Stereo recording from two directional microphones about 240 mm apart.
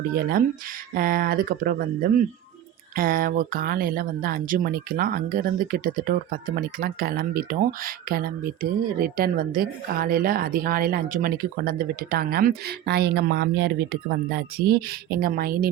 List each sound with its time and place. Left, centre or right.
0.2 s speech: right